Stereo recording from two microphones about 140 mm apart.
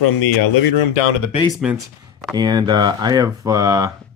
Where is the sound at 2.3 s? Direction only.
30° right (ahead or behind).